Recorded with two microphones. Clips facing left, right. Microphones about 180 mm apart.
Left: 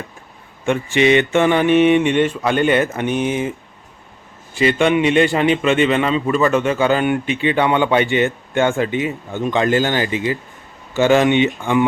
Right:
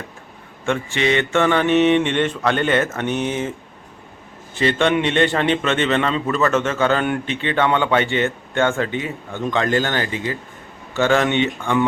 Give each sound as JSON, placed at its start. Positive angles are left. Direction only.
{"t": 0.9, "sound": "a man's voice", "side_deg": 15}
{"t": 4.5, "sound": "a man's voice", "side_deg": 10}